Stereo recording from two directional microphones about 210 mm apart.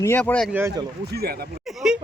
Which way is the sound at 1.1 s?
45° right (ahead or behind).